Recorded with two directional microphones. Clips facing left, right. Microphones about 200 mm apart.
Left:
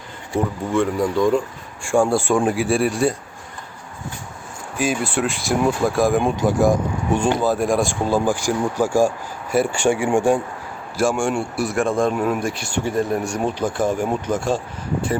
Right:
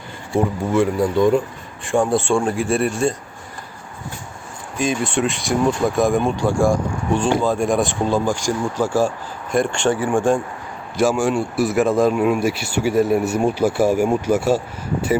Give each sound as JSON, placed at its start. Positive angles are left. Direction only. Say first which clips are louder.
{"t": 0.7, "sound": "speech", "louder": "right 1 dB", "side_deg": -5}
{"t": 2.2, "sound": "speech", "louder": "even", "side_deg": 15}
{"t": 4.8, "sound": "speech", "louder": "right 1 dB", "side_deg": 5}
{"t": 6.1, "sound": "speech", "louder": "even", "side_deg": 15}
{"t": 7.2, "sound": "speech", "louder": "right 1 dB", "side_deg": 5}
{"t": 11.0, "sound": "speech", "louder": "right 2 dB", "side_deg": 0}